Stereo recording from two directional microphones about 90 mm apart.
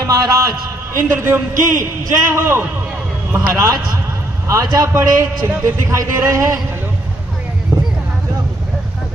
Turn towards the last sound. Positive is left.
turn(degrees=-35)  # may be behind; listen again after turning